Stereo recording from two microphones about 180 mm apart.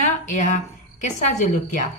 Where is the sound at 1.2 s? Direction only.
45° left (ahead or behind).